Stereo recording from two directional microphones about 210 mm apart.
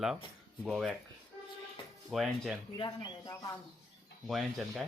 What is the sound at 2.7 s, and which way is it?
Speech, 20° left (ahead or behind).